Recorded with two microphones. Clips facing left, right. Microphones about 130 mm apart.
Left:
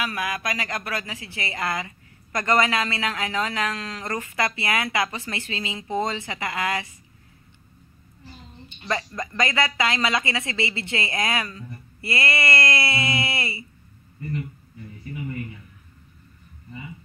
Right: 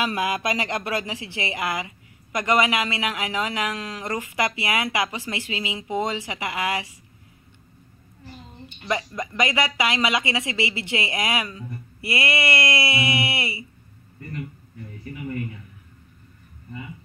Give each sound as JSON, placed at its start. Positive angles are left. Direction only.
{"t": 0.0, "sound": "speech", "side_deg": -25}
{"t": 8.8, "sound": "speech", "side_deg": -15}